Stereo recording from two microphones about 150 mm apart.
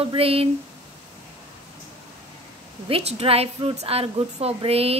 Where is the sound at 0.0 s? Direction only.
40° right (ahead or behind).